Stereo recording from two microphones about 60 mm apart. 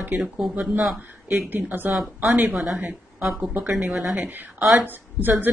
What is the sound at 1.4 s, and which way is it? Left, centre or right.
Speech, right.